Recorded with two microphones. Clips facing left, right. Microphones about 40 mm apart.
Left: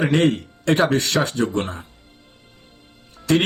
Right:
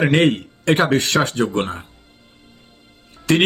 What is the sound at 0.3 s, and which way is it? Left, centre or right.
Speech, right.